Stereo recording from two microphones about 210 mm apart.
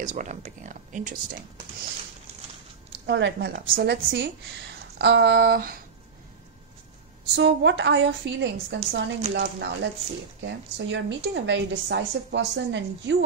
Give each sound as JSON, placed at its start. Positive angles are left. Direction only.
{"t": 0.0, "sound": "speech", "side_deg": -35}
{"t": 3.1, "sound": "a woman's voice", "side_deg": -55}
{"t": 7.3, "sound": "a woman's voice", "side_deg": -60}